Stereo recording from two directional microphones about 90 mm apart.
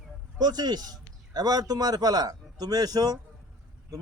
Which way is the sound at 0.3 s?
50° right (ahead or behind).